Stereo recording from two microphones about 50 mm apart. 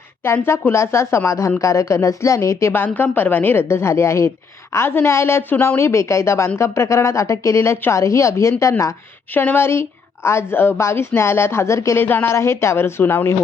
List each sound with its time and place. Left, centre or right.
0.4 s a woman's voice: left
2.7 s a woman's voice: left
4.7 s speech: left
5.4 s speech: left
5.6 s a woman's voice: left
9.3 s speech: left
10.2 s a woman's voice: left
10.8 s speech: left
11.9 s a woman's voice: left
12.3 s speech: left